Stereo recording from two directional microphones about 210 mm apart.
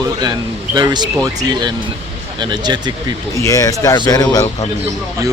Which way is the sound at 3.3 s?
15° left (ahead or behind).